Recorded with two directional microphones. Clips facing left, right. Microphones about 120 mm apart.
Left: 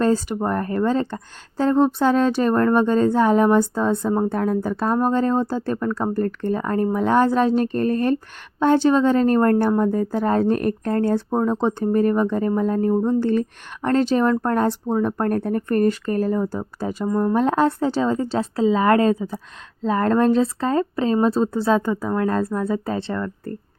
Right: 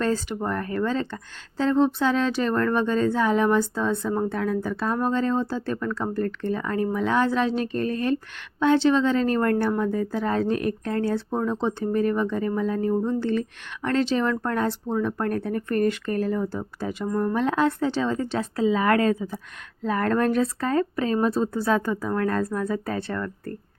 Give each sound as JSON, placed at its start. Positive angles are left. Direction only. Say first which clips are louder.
{"t": 0.0, "sound": "speech", "louder": "left 5 dB", "side_deg": 35}